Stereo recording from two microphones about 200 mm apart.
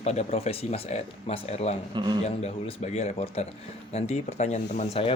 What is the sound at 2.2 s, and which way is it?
A man's voice, 30° left (ahead or behind).